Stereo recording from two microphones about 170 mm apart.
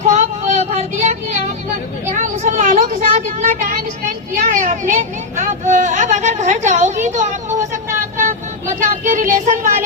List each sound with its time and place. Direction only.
0.0 s child singing: 45° right (ahead or behind)
2.0 s a sound: 45° right (ahead or behind)
4.5 s children playing: 45° right (ahead or behind)
8.8 s speech: 50° right (ahead or behind)